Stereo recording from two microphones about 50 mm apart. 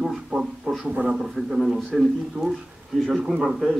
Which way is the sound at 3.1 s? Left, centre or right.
Centre.